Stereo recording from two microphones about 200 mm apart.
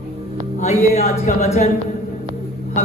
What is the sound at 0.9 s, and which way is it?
Speech, 40° left (ahead or behind).